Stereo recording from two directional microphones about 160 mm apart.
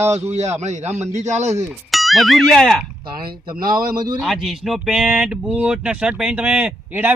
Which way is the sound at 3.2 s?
65° right (ahead or behind).